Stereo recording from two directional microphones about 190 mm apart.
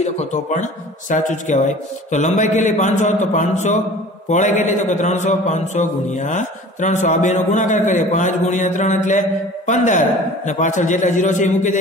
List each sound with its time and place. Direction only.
0.0 s a man's voice: 40° left (ahead or behind)